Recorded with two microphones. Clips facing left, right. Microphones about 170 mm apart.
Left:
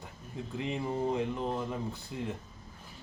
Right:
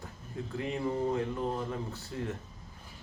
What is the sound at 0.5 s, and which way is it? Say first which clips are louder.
Speech: right 1 dB; 20° left (ahead or behind).